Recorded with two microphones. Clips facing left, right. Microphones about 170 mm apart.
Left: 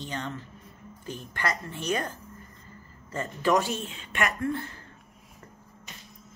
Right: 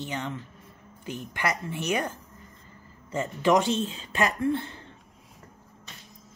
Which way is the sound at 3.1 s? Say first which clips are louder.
Right 2 dB; 15° right (ahead or behind).